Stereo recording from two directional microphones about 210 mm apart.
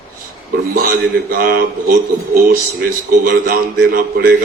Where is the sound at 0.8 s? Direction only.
45° right (ahead or behind).